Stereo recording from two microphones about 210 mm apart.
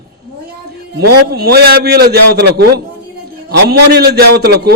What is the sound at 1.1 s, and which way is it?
A man's voice, 50° right (ahead or behind).